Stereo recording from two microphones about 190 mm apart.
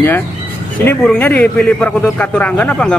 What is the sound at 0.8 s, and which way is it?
A man's voice, 10° left (ahead or behind).